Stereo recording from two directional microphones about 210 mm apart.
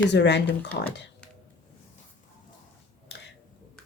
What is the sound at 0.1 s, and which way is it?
Speech, 55° left (ahead or behind).